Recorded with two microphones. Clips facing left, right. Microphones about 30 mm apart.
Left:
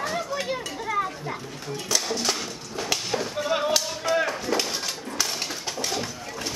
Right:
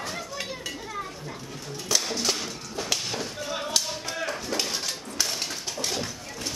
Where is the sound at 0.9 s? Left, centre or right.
Left.